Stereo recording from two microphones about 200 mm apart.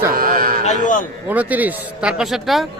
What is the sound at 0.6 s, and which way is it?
Speech, 35° left (ahead or behind).